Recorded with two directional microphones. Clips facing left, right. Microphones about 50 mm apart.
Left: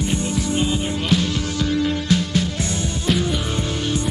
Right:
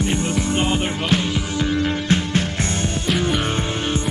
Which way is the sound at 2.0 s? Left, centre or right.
Right.